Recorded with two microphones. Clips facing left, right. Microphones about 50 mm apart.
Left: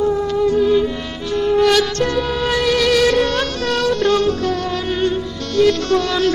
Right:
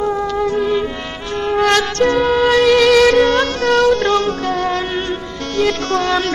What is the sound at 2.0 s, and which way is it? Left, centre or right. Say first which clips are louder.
Music: right 6 dB; right.